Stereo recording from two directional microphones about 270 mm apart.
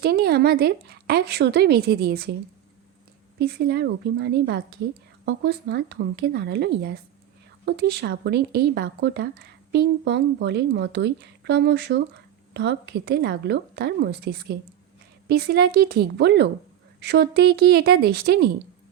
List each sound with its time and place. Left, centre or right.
0.0 s speech: right
3.3 s speech: right